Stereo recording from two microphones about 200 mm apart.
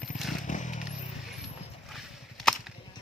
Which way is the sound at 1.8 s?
Centre (ahead or behind).